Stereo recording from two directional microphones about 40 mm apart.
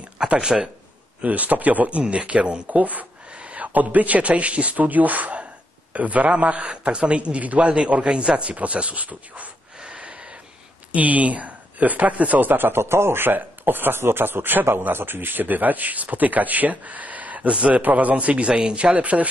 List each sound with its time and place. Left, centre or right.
0.4 s speech: centre
1.2 s a man's voice: right
9.8 s a sound: right
10.9 s speech: right
12.4 s a man's voice: right
18.5 s a man's voice: right